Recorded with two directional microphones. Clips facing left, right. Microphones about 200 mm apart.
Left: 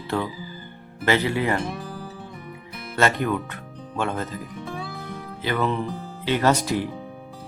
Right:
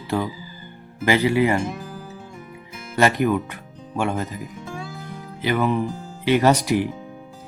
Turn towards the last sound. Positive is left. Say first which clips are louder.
# right 3 dB
turn(degrees=-15)  # may be behind; listen again after turning